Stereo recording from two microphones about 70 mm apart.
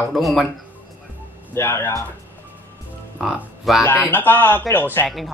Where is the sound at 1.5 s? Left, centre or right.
Left.